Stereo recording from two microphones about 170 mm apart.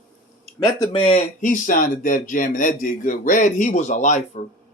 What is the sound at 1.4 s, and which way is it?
Speech, 50° left (ahead or behind).